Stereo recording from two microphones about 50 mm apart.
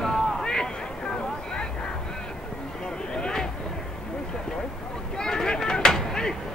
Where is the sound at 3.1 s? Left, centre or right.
Centre.